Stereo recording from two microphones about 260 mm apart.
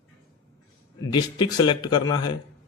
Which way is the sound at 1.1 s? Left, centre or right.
Centre.